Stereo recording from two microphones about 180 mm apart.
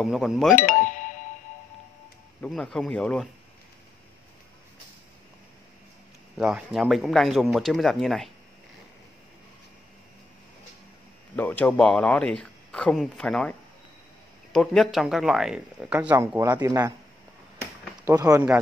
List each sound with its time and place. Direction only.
0.0 s speech: centre (ahead or behind)
0.6 s music: 45° left (ahead or behind)
2.4 s speech: 5° left (ahead or behind)
6.3 s speech: centre (ahead or behind)
11.3 s speech: 10° left (ahead or behind); by 16.9 s 20° right (ahead or behind)
18.0 s speech: 15° right (ahead or behind)